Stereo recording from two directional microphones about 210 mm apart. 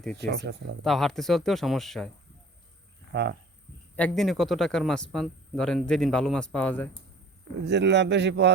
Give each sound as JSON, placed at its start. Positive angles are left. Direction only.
{"t": 0.2, "sound": "speech", "side_deg": -55}
{"t": 0.9, "sound": "speech", "side_deg": 0}
{"t": 3.1, "sound": "speech", "side_deg": -50}
{"t": 3.9, "sound": "speech", "side_deg": 5}
{"t": 7.6, "sound": "speech", "side_deg": -55}